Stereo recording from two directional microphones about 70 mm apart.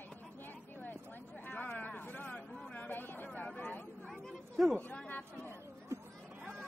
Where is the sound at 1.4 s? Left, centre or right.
Left.